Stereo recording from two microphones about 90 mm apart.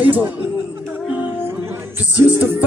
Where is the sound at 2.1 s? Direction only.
20° right (ahead or behind).